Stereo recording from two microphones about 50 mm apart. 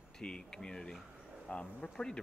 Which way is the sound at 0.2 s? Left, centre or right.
Centre.